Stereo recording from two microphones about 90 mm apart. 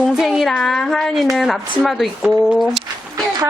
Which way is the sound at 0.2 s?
5° right (ahead or behind).